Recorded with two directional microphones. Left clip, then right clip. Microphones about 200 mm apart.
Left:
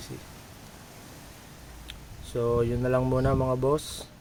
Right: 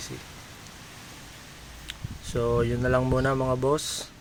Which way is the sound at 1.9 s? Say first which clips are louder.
Right 3 dB; centre (ahead or behind).